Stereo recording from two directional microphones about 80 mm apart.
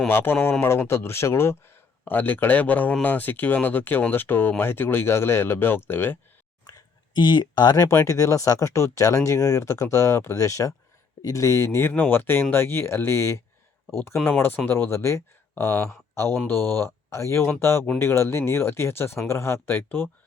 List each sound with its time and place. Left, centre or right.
0.1 s speech: left
2.0 s speech: left
6.7 s a sound: left
7.9 s speech: left